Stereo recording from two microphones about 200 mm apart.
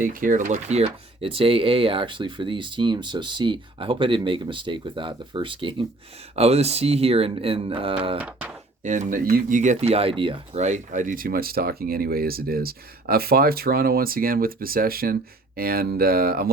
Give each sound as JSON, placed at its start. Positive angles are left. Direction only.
{"t": 0.0, "sound": "speech", "side_deg": -45}
{"t": 8.8, "sound": "speech", "side_deg": -40}